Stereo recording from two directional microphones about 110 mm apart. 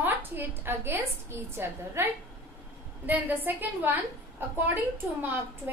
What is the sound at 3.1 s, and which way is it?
A woman's voice, 15° right (ahead or behind).